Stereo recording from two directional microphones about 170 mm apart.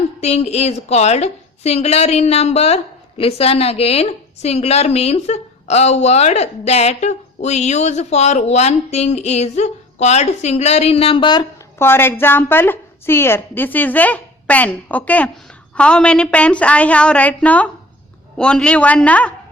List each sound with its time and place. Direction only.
0.2 s a woman's voice: 40° left (ahead or behind)
11.8 s a woman's voice: 15° left (ahead or behind)